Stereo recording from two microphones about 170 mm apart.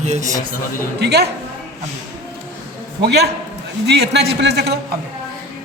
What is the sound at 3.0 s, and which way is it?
A man's voice, 75° right (ahead or behind).